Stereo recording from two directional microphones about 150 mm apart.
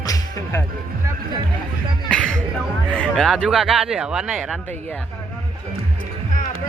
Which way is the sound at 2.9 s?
5° left (ahead or behind).